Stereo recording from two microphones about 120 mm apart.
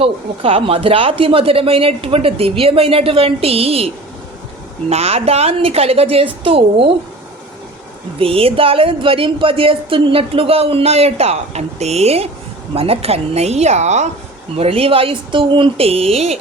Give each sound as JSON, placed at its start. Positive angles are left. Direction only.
{"t": 0.0, "sound": "a woman's voice", "side_deg": -50}
{"t": 8.2, "sound": "a woman's voice", "side_deg": -50}
{"t": 14.5, "sound": "speech", "side_deg": -55}